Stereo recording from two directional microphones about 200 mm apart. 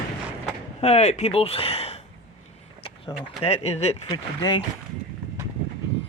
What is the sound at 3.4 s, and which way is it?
Speech, 30° left (ahead or behind).